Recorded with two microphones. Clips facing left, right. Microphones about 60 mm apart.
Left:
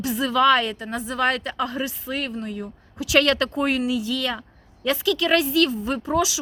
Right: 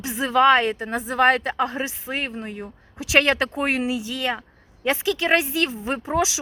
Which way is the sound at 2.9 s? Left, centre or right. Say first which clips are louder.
Even; right.